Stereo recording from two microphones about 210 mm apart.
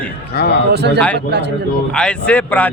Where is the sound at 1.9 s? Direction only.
5° left (ahead or behind).